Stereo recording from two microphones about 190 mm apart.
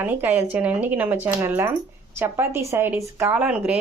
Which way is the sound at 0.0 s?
10° right (ahead or behind).